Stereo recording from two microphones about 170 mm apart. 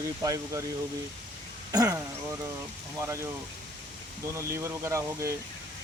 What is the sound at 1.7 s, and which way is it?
Speech, 20° right (ahead or behind).